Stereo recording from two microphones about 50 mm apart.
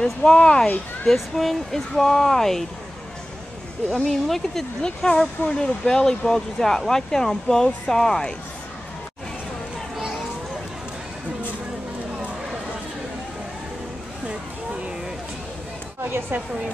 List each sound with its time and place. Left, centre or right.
0.0 s speech: centre
1.0 s speech: centre
3.9 s speech: centre
4.8 s speech: centre
16.1 s speech: right